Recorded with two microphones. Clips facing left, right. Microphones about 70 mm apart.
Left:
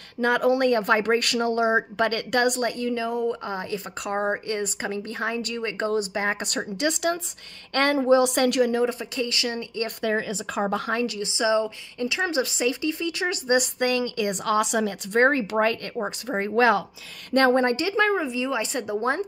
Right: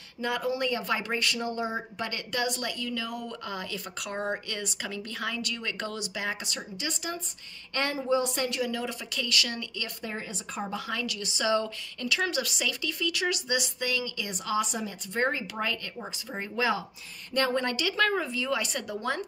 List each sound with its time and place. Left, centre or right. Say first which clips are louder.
0.2 s speech: left 9 dB; left
2.0 s speech: left 9 dB; left
2.6 s speech: left 8 dB; left
6.4 s speech: left 10 dB; left
8.7 s speech: left 9 dB; left
10.0 s speech: left 14 dB; left
10.8 s a woman's voice: left 7 dB; left
17.3 s speech: left 8 dB; left